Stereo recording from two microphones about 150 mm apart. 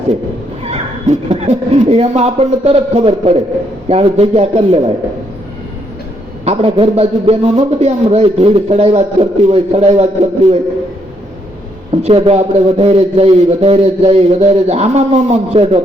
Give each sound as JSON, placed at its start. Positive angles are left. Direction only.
{"t": 1.3, "sound": "a man's voice", "side_deg": -45}
{"t": 6.4, "sound": "a man's voice", "side_deg": -40}
{"t": 12.0, "sound": "a man's voice", "side_deg": -40}